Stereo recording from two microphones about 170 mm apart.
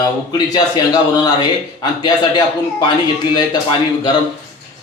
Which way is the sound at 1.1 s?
25° left (ahead or behind).